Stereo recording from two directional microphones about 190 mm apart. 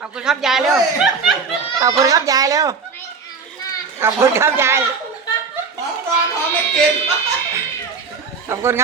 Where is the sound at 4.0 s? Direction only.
15° right (ahead or behind).